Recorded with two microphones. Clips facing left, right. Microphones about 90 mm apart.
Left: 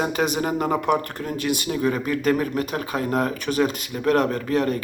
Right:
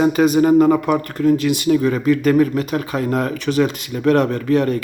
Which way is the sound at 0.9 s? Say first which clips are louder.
Right 7 dB; 55° left (ahead or behind).